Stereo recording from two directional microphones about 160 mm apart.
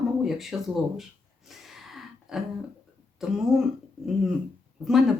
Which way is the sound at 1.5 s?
Centre (ahead or behind).